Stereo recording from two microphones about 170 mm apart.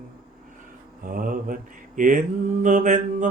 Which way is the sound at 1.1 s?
55° right (ahead or behind).